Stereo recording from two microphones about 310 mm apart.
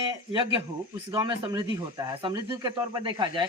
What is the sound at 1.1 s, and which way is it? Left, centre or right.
Speech, centre.